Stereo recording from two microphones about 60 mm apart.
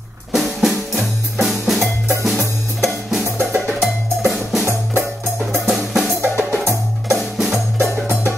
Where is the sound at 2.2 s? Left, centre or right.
Centre.